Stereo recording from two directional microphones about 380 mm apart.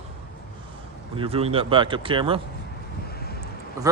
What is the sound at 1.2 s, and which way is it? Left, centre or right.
Speech, centre.